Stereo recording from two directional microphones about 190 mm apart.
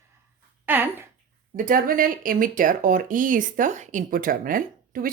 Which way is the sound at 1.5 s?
45° right (ahead or behind).